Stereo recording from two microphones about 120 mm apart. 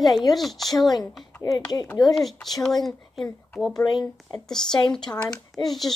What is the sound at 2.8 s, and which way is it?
Speech, centre (ahead or behind).